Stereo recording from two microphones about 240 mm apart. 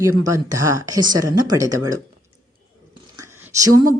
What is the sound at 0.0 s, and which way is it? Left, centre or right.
Speech, centre.